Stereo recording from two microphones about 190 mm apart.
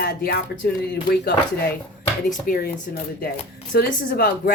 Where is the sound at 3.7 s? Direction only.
55° left (ahead or behind).